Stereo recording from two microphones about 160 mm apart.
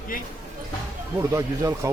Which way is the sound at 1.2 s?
20° right (ahead or behind).